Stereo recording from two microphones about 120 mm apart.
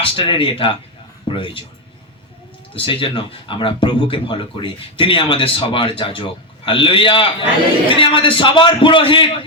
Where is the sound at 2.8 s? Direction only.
45° left (ahead or behind).